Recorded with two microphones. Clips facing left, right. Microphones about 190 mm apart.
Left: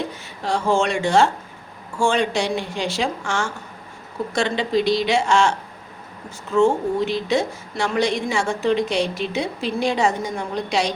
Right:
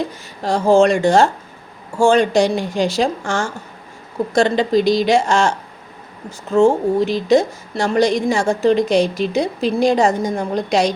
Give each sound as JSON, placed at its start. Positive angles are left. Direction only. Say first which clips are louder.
{"t": 0.4, "sound": "a woman's voice", "louder": "right 7 dB", "side_deg": -40}
{"t": 6.6, "sound": "a woman's voice", "louder": "right 4 dB", "side_deg": -35}